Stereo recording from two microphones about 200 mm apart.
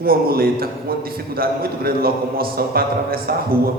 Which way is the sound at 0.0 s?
50° right (ahead or behind).